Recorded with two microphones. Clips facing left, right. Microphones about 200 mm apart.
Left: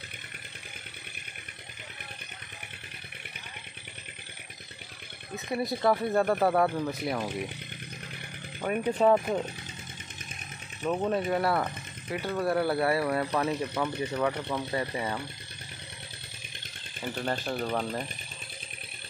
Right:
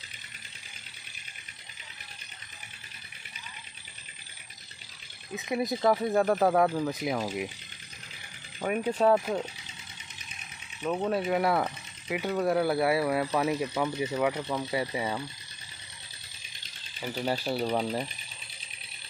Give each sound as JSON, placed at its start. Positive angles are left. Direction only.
{"t": 5.5, "sound": "speech", "side_deg": -20}
{"t": 5.8, "sound": "speech", "side_deg": 0}
{"t": 8.5, "sound": "speech", "side_deg": -5}
{"t": 10.8, "sound": "speech", "side_deg": 0}
{"t": 11.1, "sound": "speech", "side_deg": -10}
{"t": 17.2, "sound": "speech", "side_deg": -10}